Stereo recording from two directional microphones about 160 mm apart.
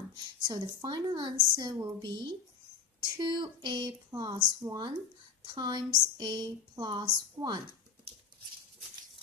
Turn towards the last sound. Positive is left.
turn(degrees=-25)  # may be behind; listen again after turning